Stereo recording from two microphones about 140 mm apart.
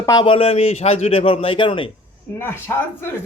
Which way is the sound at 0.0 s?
25° left (ahead or behind).